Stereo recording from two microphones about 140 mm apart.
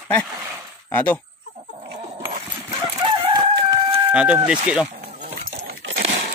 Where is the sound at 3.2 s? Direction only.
30° right (ahead or behind).